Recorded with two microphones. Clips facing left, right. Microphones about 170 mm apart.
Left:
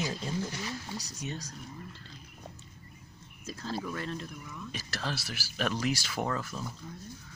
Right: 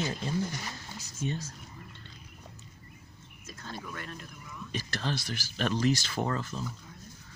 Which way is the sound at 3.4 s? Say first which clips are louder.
Left 6 dB; 30° left (ahead or behind).